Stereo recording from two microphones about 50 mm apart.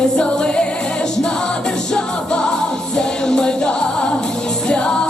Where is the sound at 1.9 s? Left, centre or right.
Centre.